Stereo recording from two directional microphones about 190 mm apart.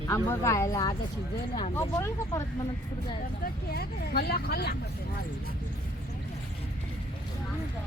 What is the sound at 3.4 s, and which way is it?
Speech, 55° left (ahead or behind).